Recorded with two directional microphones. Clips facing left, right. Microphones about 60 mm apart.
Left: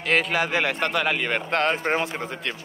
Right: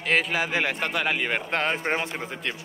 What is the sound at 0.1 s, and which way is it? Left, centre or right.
Speech, centre.